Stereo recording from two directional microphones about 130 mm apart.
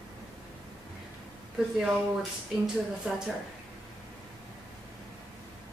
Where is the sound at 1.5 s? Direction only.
5° right (ahead or behind).